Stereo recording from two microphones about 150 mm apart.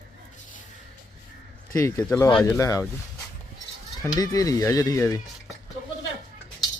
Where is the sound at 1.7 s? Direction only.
20° left (ahead or behind).